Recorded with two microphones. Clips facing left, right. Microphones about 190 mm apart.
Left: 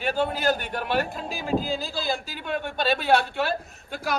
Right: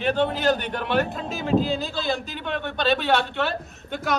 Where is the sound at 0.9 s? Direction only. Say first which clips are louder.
Right 3 dB; centre (ahead or behind).